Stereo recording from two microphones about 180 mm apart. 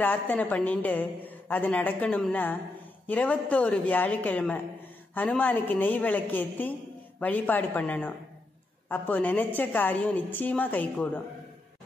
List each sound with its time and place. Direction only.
0.0 s a woman's voice: 10° left (ahead or behind)